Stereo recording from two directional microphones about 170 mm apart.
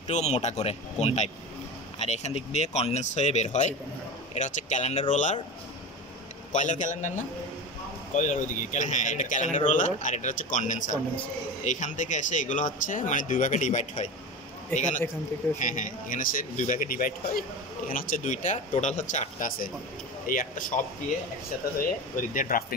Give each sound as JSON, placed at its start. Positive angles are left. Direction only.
{"t": 0.1, "sound": "speech", "side_deg": 40}
{"t": 6.5, "sound": "speech", "side_deg": 45}
{"t": 15.6, "sound": "speech", "side_deg": 50}